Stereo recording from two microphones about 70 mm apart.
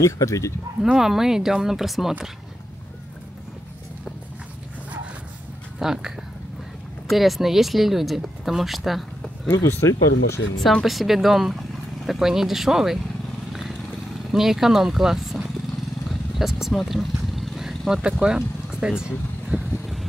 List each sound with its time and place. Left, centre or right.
0.0 s speech: left
0.8 s speech: centre
5.8 s speech: centre
9.5 s speech: left
10.6 s speech: centre
10.9 s speech: centre
13.5 s vehicle: centre
18.2 s speech: centre